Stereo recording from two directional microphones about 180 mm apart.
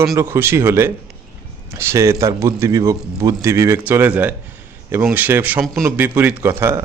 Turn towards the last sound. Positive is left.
turn(degrees=-15)  # may be behind; listen again after turning